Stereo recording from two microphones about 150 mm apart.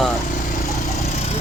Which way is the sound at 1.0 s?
50° left (ahead or behind).